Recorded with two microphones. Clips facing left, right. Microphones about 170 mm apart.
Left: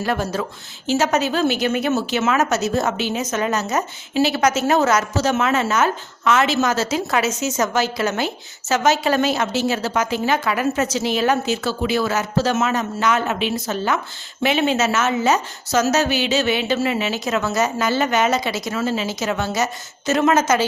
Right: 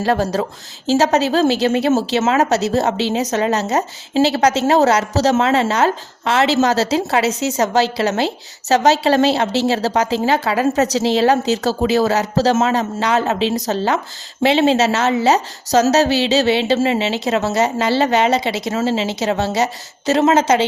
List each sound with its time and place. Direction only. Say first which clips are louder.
0.0 s a woman's voice: right 5 dB; 35° right (ahead or behind)